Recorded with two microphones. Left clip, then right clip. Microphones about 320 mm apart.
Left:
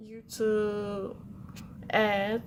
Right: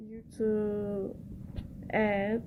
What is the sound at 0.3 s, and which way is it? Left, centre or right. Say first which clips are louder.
Speech: left 3 dB; centre.